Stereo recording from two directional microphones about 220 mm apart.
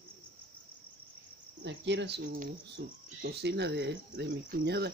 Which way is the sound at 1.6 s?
55° right (ahead or behind).